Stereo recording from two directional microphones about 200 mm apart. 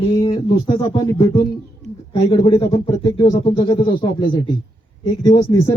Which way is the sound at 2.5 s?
20° left (ahead or behind).